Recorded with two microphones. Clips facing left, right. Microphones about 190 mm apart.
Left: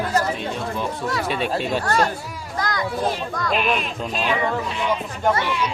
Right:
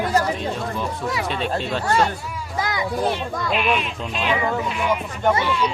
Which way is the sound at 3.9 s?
40° left (ahead or behind).